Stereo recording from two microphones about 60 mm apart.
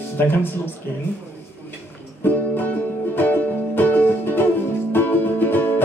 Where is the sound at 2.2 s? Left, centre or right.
Left.